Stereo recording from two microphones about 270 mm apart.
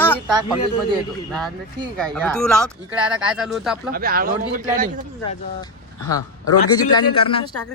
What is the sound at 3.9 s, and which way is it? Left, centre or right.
Speech, right.